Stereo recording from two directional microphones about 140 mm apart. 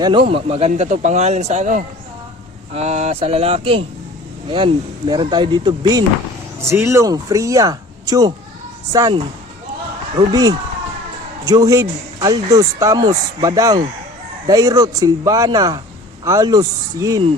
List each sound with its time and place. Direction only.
0.0 s speech: 35° right (ahead or behind)
0.7 s speech: 60° right (ahead or behind); by 9.1 s 25° right (ahead or behind)
10.2 s speech: 25° right (ahead or behind)